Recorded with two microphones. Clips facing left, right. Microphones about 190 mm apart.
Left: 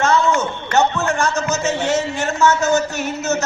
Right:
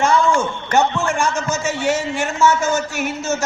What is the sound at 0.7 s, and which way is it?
A man's voice, 15° right (ahead or behind).